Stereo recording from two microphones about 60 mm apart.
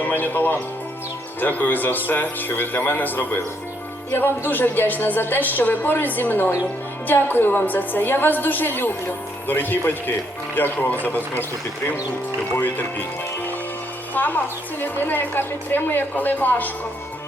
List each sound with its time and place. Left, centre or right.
0.0 s a man's voice: left
12.5 s a woman's voice: left